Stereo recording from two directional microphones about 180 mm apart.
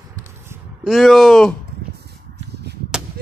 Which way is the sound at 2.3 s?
70° right (ahead or behind).